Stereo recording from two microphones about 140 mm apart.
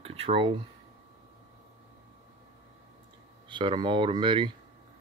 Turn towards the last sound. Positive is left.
turn(degrees=-35)  # may be behind; listen again after turning